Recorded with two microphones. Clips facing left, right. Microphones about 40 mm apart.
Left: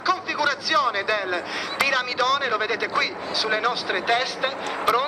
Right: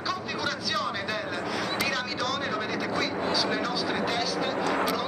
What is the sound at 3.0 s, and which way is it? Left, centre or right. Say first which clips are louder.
Speech: left 2 dB; left.